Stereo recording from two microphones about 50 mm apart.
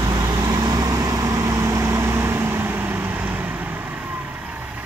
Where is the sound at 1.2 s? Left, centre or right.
Right.